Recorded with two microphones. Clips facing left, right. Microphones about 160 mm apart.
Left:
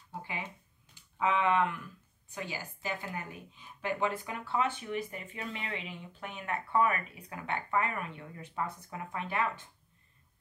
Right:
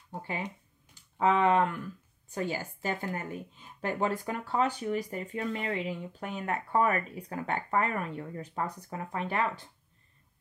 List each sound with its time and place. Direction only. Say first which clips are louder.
1.1 s speech: right 4 dB; 40° right (ahead or behind)